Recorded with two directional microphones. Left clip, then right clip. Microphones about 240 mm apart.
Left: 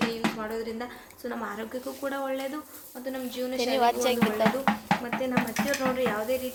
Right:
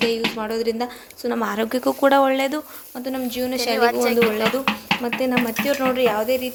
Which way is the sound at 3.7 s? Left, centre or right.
Centre.